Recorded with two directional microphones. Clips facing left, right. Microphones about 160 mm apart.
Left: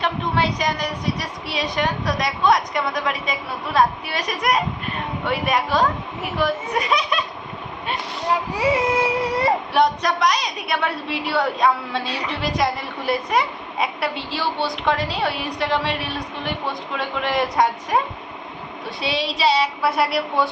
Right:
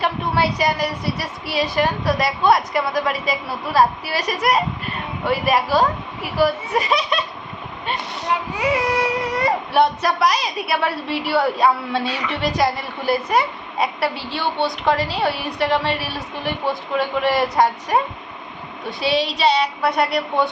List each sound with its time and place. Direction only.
0.0 s a woman's voice: 5° right (ahead or behind)
8.5 s baby cry: 30° left (ahead or behind)
9.7 s a woman's voice: 5° right (ahead or behind)